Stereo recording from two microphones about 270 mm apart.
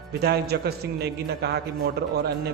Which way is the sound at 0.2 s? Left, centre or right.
Right.